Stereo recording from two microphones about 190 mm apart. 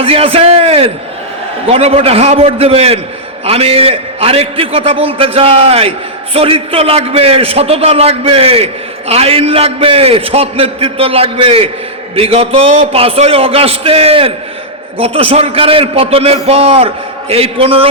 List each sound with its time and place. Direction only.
0.0 s a man's voice: 30° right (ahead or behind)